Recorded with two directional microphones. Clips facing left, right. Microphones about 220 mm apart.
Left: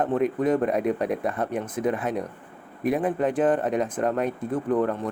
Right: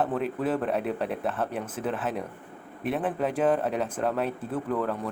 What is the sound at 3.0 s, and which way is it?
Speech, 10° right (ahead or behind).